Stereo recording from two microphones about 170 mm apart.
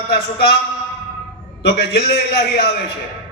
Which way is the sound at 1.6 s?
75° left (ahead or behind).